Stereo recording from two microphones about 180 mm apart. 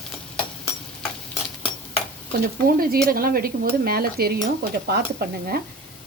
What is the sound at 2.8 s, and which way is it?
A woman's voice, 55° right (ahead or behind).